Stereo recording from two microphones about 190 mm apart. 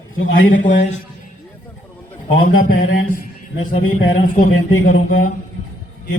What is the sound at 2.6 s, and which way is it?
Speech, 50° left (ahead or behind).